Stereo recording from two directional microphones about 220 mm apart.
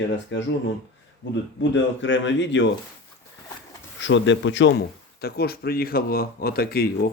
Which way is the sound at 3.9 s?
55° left (ahead or behind).